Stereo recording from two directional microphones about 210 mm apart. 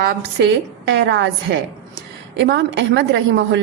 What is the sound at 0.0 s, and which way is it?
Speech, 45° right (ahead or behind).